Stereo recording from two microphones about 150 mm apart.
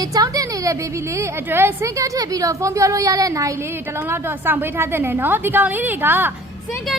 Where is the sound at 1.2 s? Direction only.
15° right (ahead or behind).